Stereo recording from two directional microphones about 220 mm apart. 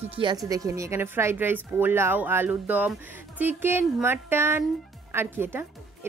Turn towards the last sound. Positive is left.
turn(degrees=-10)  # may be behind; listen again after turning